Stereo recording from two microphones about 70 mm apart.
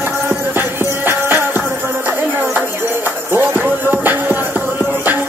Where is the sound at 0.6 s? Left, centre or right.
Right.